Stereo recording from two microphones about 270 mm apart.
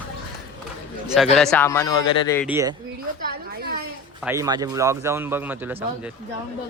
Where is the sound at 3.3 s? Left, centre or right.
Right.